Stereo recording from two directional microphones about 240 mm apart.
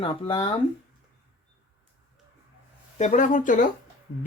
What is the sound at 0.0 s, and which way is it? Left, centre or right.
Speech, left.